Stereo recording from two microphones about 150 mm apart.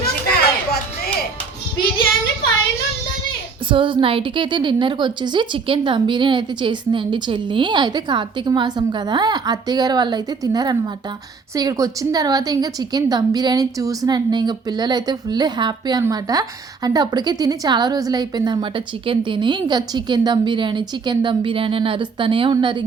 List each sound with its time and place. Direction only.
0.3 s music: 90° left
3.7 s a woman's voice: 35° right (ahead or behind)